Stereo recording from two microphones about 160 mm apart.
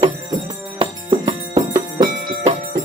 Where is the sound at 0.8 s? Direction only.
35° right (ahead or behind).